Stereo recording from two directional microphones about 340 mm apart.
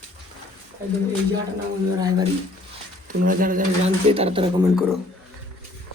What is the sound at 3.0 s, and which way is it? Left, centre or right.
Speech, right.